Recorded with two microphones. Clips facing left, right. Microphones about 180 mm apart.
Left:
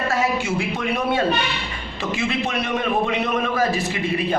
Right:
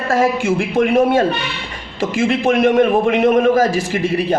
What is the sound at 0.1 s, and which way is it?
A woman's voice, 50° right (ahead or behind).